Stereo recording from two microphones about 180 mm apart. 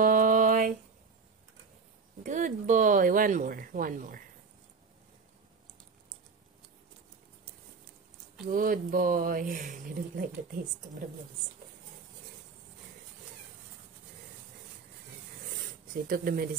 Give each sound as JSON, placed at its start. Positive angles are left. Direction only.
{"t": 0.0, "sound": "a sound", "side_deg": -50}
{"t": 2.2, "sound": "speech", "side_deg": -45}
{"t": 8.5, "sound": "speech", "side_deg": -50}
{"t": 16.1, "sound": "speech", "side_deg": -55}